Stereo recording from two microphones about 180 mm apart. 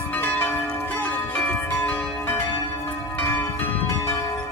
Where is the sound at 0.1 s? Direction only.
10° left (ahead or behind).